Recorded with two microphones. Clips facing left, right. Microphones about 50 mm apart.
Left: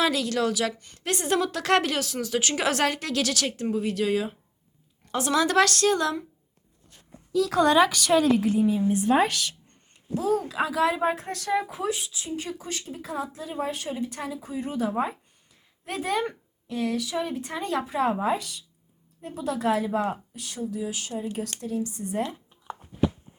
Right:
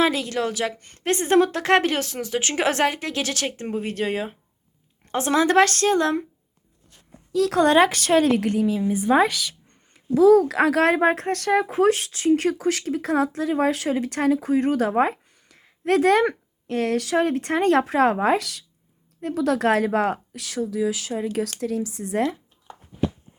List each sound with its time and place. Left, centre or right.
0.0 s a woman's voice: right
2.8 s a woman's voice: centre; by 6.2 s right
7.3 s a woman's voice: right
10.5 s a woman's voice: right
11.8 s speech: right